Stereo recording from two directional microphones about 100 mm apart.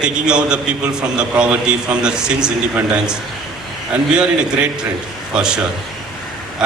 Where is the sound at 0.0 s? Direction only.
10° right (ahead or behind).